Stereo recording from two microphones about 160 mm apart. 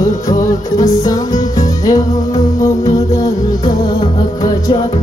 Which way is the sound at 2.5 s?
20° left (ahead or behind).